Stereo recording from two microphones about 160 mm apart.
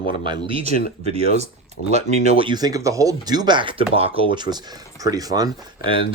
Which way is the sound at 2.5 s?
25° right (ahead or behind).